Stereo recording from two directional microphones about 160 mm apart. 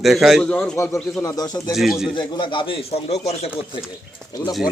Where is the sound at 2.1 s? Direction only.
30° left (ahead or behind).